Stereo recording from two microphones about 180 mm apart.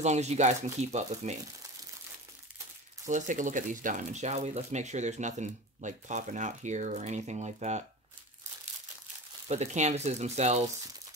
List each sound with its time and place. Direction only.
0.0 s speech: 40° right (ahead or behind)
3.1 s speech: 45° right (ahead or behind)
9.5 s speech: 40° right (ahead or behind)